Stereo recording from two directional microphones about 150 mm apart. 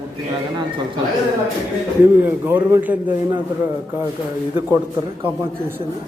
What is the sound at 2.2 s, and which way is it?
Speech, 15° right (ahead or behind).